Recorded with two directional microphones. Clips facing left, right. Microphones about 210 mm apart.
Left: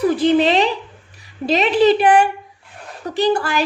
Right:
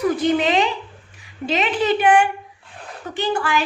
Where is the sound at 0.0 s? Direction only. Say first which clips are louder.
Left 4 dB; 30° left (ahead or behind).